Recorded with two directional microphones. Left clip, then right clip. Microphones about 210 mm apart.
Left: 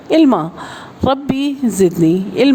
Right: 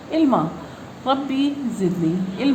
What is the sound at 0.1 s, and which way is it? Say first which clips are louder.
A woman's voice: left 7 dB; 50° left (ahead or behind).